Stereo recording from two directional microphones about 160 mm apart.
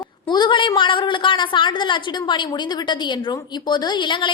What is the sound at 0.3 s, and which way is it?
A woman's voice, 30° left (ahead or behind).